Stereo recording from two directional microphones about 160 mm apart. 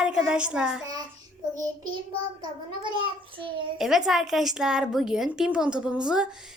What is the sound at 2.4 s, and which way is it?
Speech, 30° right (ahead or behind).